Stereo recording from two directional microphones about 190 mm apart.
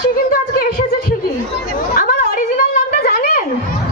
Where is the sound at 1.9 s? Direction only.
50° left (ahead or behind).